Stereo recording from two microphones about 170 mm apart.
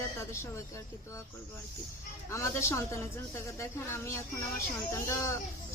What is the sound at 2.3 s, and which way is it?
Speech, 15° left (ahead or behind).